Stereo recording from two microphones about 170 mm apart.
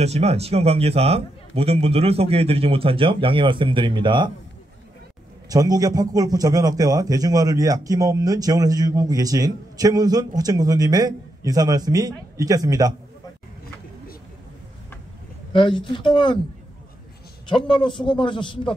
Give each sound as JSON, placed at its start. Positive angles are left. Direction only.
{"t": 0.0, "sound": "a man's voice", "side_deg": -40}
{"t": 5.5, "sound": "a man's voice", "side_deg": -20}
{"t": 15.5, "sound": "a man's voice", "side_deg": 30}
{"t": 17.5, "sound": "a man's voice", "side_deg": 30}